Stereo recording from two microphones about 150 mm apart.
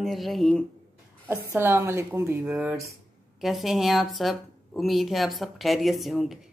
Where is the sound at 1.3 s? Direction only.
15° right (ahead or behind).